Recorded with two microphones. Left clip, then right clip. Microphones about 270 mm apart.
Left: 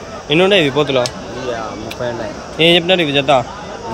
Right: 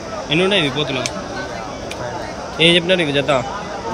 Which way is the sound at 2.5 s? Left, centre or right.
Centre.